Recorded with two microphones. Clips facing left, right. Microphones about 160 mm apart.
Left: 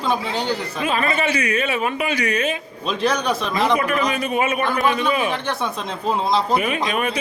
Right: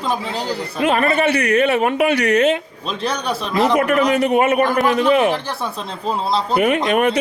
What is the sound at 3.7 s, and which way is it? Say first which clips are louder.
A man's voice: right 5 dB; 65° right (ahead or behind).